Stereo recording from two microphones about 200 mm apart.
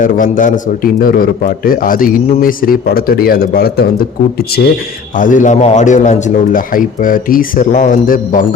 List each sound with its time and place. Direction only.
0.0 s a man's voice: 40° left (ahead or behind)
5.1 s a man's voice: 40° left (ahead or behind)